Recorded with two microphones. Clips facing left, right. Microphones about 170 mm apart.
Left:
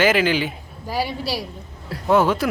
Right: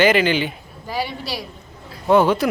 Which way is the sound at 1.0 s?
35° left (ahead or behind).